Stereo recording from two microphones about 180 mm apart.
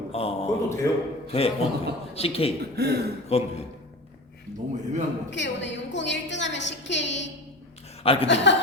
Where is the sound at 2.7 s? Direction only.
65° right (ahead or behind).